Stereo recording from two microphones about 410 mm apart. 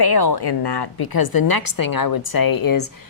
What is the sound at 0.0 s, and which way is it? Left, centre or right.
A woman's voice, left.